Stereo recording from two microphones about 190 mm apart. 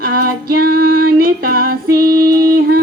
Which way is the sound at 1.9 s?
50° right (ahead or behind).